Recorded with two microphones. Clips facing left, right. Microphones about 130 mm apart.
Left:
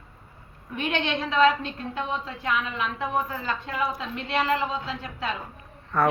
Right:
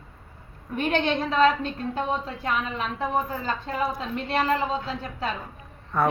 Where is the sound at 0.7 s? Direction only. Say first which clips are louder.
Right 3 dB; 40° right (ahead or behind).